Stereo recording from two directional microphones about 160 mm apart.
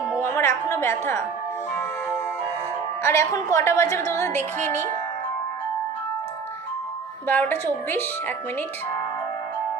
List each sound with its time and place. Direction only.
0.2 s a woman's voice: 15° left (ahead or behind)
3.0 s a woman's voice: 15° left (ahead or behind)
7.3 s a woman's voice: 15° left (ahead or behind)